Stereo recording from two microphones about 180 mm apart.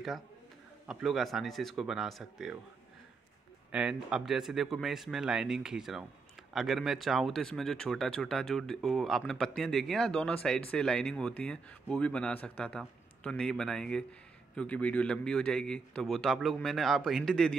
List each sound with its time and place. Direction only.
0.8 s speech: centre (ahead or behind)
3.7 s speech: 5° right (ahead or behind)